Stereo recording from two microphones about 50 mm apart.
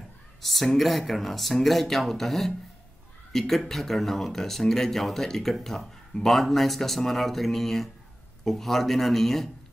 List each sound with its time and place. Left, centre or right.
0.4 s a woman's voice: centre